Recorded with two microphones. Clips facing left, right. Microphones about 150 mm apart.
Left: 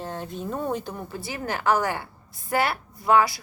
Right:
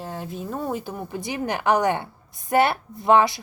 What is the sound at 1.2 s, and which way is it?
A woman's voice, 20° right (ahead or behind).